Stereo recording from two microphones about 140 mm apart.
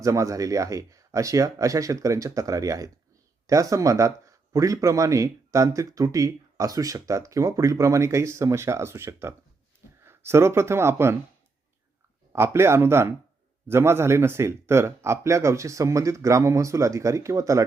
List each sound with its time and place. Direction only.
0.0 s speech: 25° right (ahead or behind)
12.3 s speech: 20° right (ahead or behind)